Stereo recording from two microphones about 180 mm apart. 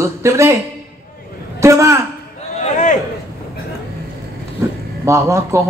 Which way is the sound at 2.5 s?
40° left (ahead or behind).